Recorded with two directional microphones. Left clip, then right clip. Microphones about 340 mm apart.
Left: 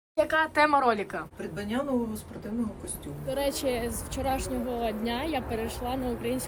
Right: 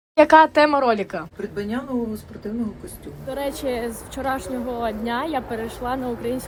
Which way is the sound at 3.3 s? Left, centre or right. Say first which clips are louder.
Right 3 dB; centre.